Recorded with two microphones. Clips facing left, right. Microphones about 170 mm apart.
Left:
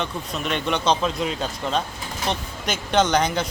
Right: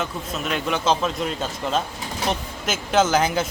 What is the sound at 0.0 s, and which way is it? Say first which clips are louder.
Speech: even; 5° right (ahead or behind).